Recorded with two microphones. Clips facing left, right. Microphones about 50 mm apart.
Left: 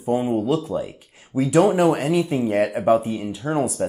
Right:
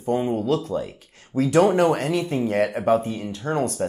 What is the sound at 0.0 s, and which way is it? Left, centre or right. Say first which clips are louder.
Speech: left 2 dB; centre.